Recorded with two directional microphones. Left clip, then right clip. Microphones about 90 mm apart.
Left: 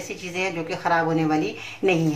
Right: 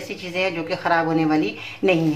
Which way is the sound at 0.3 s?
15° right (ahead or behind).